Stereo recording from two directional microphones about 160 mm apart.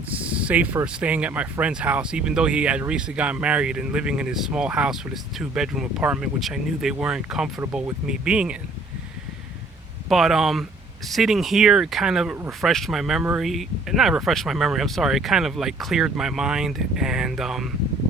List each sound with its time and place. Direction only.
0.1 s speech: 10° right (ahead or behind)
10.1 s speech: centre (ahead or behind)